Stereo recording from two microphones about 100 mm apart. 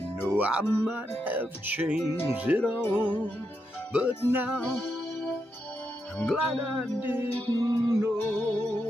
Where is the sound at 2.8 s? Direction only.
20° left (ahead or behind).